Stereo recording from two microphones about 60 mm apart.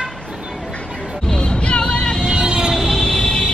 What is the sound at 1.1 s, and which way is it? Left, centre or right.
Music, centre.